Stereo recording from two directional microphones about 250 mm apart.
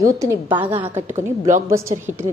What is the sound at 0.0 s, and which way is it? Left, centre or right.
A woman's voice, centre.